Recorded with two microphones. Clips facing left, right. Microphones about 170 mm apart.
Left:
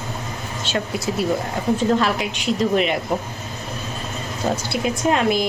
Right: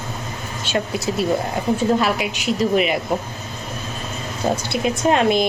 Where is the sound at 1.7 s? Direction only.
10° right (ahead or behind).